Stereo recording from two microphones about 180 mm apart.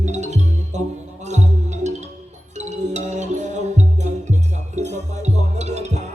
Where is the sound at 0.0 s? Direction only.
40° right (ahead or behind).